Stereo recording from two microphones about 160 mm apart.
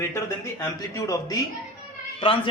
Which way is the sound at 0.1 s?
15° left (ahead or behind).